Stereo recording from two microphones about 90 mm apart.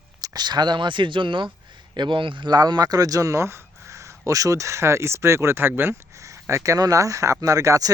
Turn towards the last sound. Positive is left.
turn(degrees=-40)  # may be behind; listen again after turning